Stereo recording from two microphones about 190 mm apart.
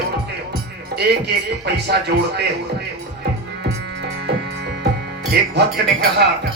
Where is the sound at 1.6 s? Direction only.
60° right (ahead or behind).